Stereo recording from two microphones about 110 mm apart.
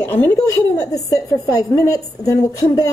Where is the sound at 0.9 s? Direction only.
30° left (ahead or behind).